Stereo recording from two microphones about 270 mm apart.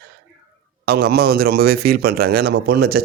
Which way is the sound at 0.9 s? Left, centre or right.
Right.